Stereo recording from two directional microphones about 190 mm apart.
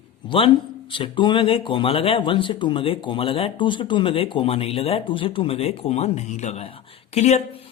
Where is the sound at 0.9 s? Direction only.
25° left (ahead or behind).